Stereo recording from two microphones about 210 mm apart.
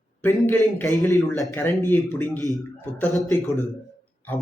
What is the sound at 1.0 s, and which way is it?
Speech, 15° left (ahead or behind).